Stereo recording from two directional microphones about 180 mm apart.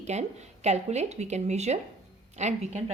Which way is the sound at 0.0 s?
40° right (ahead or behind).